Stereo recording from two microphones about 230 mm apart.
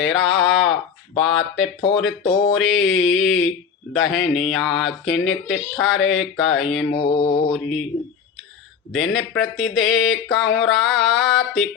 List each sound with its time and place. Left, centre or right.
0.0 s speech: centre
6.9 s mantra: centre
7.5 s speech: centre
8.9 s speech: centre